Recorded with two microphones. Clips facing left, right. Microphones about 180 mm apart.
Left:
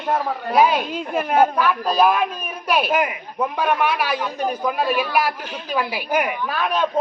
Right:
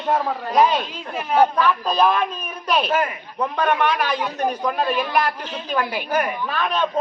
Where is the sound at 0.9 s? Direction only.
50° left (ahead or behind).